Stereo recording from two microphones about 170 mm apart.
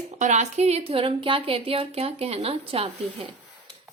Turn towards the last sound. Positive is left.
turn(degrees=-35)  # may be behind; listen again after turning